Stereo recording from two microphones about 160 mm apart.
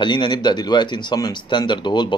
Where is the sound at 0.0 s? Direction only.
30° left (ahead or behind).